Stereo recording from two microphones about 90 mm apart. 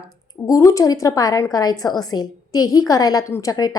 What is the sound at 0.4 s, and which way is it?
A woman's voice, 40° left (ahead or behind).